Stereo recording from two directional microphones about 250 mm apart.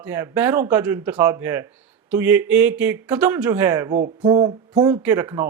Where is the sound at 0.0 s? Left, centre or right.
Centre.